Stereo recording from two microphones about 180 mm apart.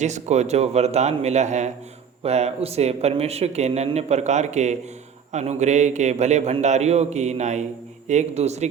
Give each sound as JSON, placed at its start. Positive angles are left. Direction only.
{"t": 0.0, "sound": "a man's voice", "side_deg": -40}